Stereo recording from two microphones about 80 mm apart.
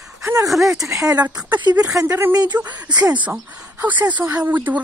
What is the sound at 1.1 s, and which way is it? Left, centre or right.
Speech, right.